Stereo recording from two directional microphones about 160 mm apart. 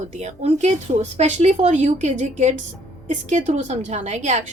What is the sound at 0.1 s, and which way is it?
A woman's voice, 45° right (ahead or behind).